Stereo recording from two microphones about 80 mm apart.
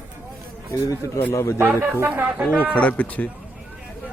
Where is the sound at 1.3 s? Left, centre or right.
Left.